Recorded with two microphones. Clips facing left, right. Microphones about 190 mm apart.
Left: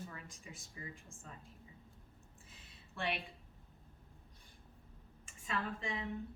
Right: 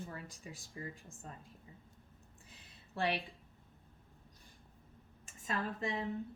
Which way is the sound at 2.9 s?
35° right (ahead or behind).